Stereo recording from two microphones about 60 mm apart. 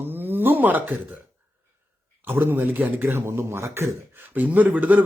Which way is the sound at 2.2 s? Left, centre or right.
Right.